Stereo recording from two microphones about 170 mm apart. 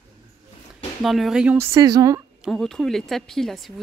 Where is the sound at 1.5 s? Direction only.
15° right (ahead or behind).